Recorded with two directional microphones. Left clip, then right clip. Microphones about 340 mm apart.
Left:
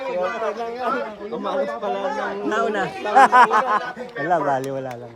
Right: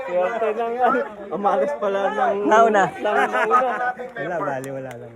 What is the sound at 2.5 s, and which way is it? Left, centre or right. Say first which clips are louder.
Speech: right 7 dB; centre.